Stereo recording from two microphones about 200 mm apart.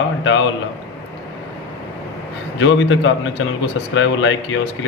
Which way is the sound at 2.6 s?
70° left (ahead or behind).